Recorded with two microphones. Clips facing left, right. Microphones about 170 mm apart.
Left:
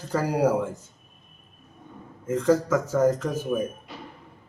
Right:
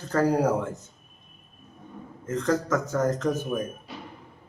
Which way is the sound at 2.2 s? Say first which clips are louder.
Left 4 dB; 10° left (ahead or behind).